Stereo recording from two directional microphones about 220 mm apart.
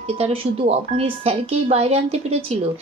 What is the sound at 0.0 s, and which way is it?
Speech, 25° right (ahead or behind).